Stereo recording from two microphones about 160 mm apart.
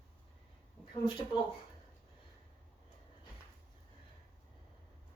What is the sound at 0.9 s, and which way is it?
Speech, 35° left (ahead or behind).